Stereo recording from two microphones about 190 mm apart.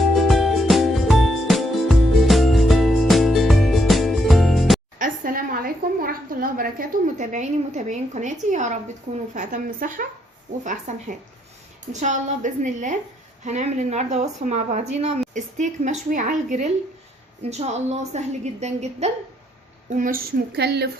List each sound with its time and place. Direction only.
0.0 s music: centre (ahead or behind)
4.9 s a sound: 45° right (ahead or behind)
9.3 s a woman's voice: 40° right (ahead or behind)
20.0 s speech: 50° right (ahead or behind)